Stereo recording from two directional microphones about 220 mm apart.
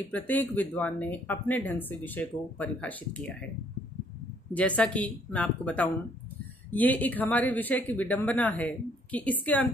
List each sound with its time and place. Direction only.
0.1 s speech: 10° left (ahead or behind)
4.6 s speech: 5° left (ahead or behind)